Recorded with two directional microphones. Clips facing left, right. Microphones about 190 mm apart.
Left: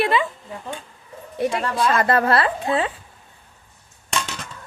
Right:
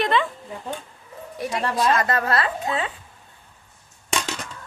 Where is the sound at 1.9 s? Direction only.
30° left (ahead or behind).